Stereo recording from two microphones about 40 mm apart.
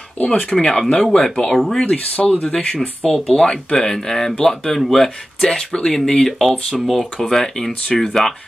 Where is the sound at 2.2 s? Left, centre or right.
Centre.